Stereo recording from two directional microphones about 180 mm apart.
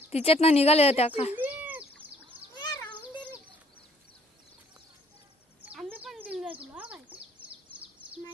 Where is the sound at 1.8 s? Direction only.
30° right (ahead or behind).